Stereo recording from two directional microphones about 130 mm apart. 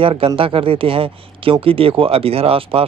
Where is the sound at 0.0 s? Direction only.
45° right (ahead or behind).